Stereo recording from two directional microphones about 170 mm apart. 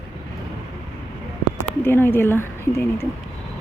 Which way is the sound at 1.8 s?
15° left (ahead or behind).